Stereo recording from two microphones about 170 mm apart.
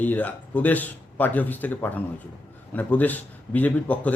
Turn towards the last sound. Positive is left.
turn(degrees=10)  # may be behind; listen again after turning